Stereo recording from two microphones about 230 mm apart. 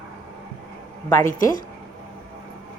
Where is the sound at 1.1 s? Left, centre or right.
Centre.